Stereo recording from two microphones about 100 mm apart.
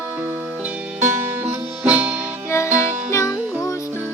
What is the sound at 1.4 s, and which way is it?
Music, 15° right (ahead or behind).